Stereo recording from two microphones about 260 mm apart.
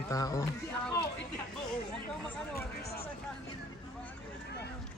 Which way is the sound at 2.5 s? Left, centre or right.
Left.